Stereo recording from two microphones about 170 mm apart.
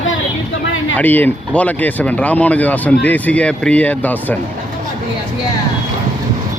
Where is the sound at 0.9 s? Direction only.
10° left (ahead or behind).